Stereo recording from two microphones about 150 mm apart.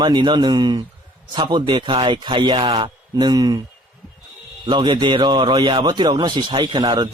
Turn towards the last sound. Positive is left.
turn(degrees=-30)  # may be behind; listen again after turning